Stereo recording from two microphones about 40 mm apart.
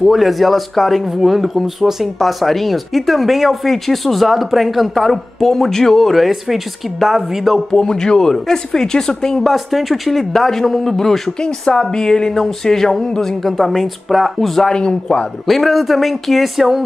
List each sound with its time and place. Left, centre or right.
0.0 s speech: centre
7.7 s a woman's voice: centre
9.5 s a woman's voice: centre
14.7 s speech: left
15.4 s speech: centre